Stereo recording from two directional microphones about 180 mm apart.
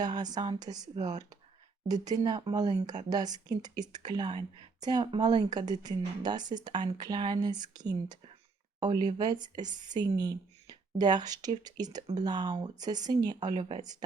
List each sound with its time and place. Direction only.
0.0 s speech: 20° right (ahead or behind)
1.9 s speech: 20° right (ahead or behind)